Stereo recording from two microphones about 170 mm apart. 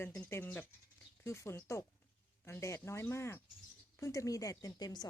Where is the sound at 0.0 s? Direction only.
15° left (ahead or behind).